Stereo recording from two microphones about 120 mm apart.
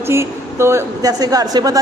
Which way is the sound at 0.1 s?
20° right (ahead or behind).